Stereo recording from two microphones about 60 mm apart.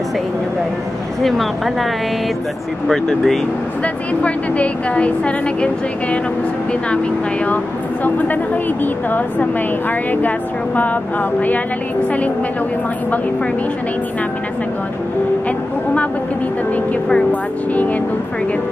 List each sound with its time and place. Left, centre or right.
1.2 s speech: centre
2.9 s speech: centre
3.8 s a woman's voice: left
7.4 s a woman's voice: left
17.1 s a woman's voice: left